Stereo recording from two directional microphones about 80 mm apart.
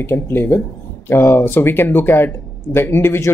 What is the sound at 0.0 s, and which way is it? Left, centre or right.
Speech, left.